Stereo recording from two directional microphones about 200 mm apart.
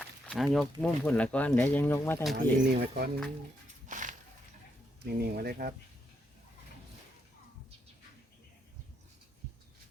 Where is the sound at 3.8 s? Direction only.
40° right (ahead or behind).